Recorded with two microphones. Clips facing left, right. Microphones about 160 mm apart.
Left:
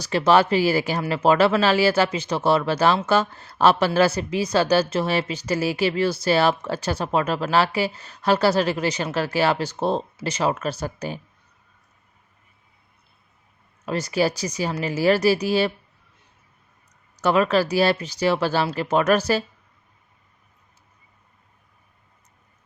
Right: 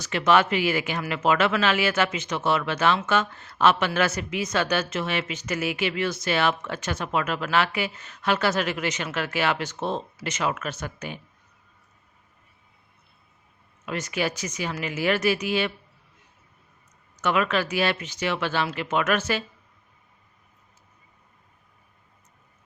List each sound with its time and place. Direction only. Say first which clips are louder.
0.0 s speech: left 3 dB; 35° left (ahead or behind)
13.8 s speech: left 6 dB; 35° left (ahead or behind)
17.2 s speech: left 5 dB; 35° left (ahead or behind)